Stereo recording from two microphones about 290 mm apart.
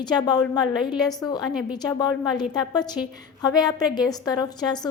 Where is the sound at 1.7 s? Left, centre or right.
Centre.